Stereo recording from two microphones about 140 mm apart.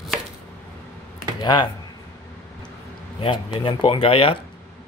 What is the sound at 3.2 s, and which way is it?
Speech, 40° left (ahead or behind).